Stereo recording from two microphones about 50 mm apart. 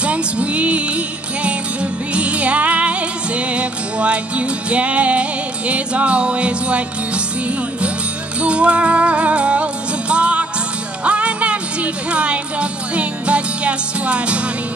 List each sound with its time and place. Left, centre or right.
0.0 s music: right
8.4 s music: right